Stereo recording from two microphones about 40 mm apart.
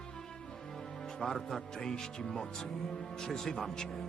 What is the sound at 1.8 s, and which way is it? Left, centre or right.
Speech, centre.